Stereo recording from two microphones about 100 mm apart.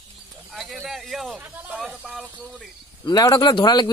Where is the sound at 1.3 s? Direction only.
15° right (ahead or behind).